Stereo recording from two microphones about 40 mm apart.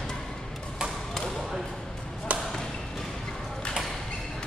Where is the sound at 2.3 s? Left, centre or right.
Right.